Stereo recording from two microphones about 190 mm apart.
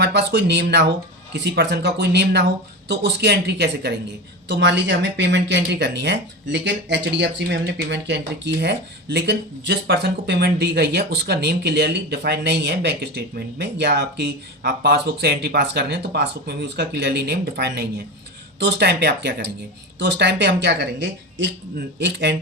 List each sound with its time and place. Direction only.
0.0 s speech: 65° right (ahead or behind)